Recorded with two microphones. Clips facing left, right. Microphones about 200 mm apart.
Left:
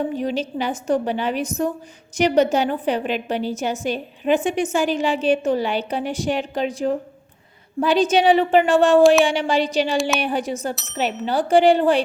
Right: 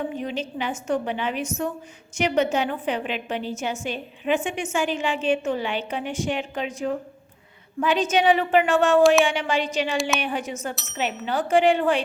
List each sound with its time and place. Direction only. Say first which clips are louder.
0.1 s a woman's voice: left 5 dB; 35° left (ahead or behind)